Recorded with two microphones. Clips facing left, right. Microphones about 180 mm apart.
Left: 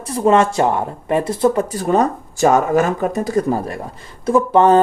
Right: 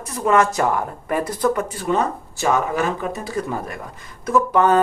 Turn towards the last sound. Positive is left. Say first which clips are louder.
# left 4 dB
turn(degrees=30)  # may be behind; listen again after turning